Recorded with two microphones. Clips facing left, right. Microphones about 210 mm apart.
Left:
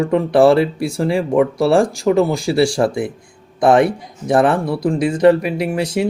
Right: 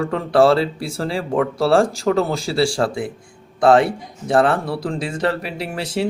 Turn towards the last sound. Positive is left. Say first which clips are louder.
# left 5 dB
turn(degrees=15)  # may be behind; listen again after turning